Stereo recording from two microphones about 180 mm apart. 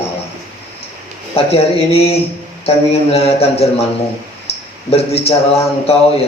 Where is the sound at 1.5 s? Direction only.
35° left (ahead or behind).